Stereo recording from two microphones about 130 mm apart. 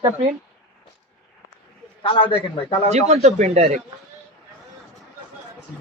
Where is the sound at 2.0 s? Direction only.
40° left (ahead or behind).